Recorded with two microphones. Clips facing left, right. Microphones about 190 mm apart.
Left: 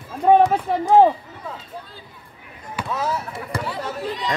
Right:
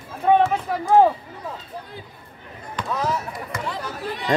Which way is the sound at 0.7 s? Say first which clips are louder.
Left 4 dB; 25° left (ahead or behind).